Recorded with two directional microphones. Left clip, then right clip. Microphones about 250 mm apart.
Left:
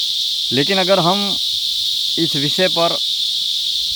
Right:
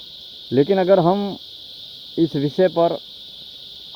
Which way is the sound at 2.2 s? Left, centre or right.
Centre.